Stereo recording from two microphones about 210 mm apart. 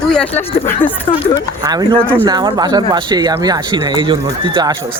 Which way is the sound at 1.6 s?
20° right (ahead or behind).